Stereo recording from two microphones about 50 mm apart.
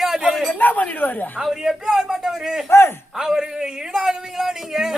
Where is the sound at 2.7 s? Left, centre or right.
Left.